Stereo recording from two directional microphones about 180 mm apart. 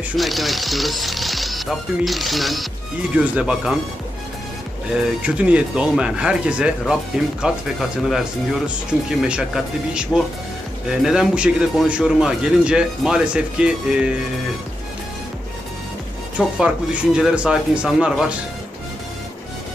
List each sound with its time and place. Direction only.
0.2 s a man's voice: centre (ahead or behind)
4.9 s a man's voice: 5° right (ahead or behind)
16.3 s a man's voice: 5° right (ahead or behind)